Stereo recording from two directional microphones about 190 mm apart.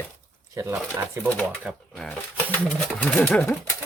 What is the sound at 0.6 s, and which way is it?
Speech, 10° right (ahead or behind).